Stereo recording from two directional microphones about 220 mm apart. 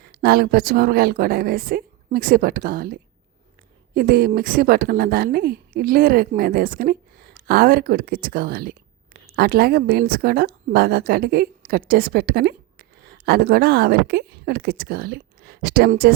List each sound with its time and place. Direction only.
0.0 s a woman's voice: 45° right (ahead or behind)